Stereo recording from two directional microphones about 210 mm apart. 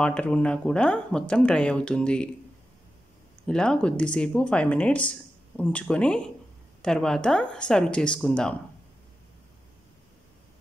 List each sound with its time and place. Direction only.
0.0 s speech: 5° left (ahead or behind)
3.4 s speech: 5° left (ahead or behind)